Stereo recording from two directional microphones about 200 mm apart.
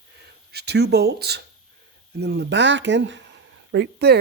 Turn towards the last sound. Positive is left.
turn(degrees=-55)  # may be behind; listen again after turning